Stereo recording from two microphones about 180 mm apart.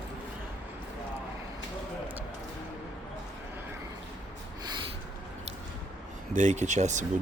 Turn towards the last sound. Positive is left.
turn(degrees=-40)  # may be behind; listen again after turning